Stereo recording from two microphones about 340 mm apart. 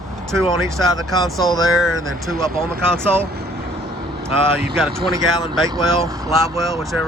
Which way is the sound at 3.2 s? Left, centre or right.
Right.